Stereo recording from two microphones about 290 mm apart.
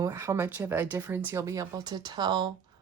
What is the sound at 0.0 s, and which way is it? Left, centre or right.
Speech, centre.